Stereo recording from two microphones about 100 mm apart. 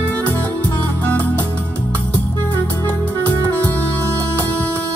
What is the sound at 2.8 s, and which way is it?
Music, 15° left (ahead or behind).